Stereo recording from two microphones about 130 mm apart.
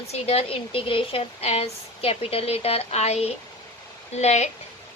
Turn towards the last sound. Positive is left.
turn(degrees=60)  # may be behind; listen again after turning